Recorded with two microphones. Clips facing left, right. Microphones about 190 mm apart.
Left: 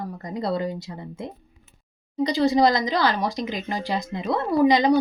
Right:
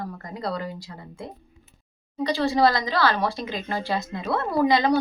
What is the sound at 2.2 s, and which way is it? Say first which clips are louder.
Speech: left 2 dB; 20° left (ahead or behind).